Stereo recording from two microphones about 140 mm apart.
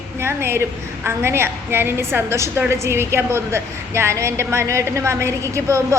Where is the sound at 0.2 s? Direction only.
15° right (ahead or behind).